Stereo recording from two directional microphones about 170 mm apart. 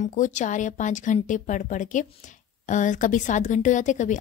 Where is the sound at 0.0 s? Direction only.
50° left (ahead or behind).